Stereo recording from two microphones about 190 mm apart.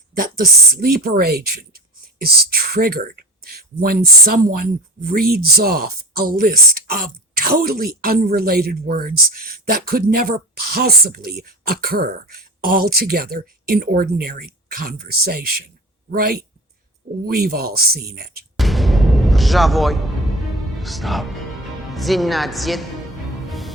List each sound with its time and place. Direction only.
0.2 s speech: 50° right (ahead or behind)
18.5 s music: centre (ahead or behind)
20.7 s speech: centre (ahead or behind)
23.5 s music: centre (ahead or behind)